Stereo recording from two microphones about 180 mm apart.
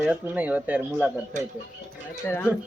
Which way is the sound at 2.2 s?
15° left (ahead or behind).